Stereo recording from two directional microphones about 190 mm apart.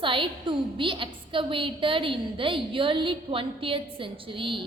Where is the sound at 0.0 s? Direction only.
25° right (ahead or behind).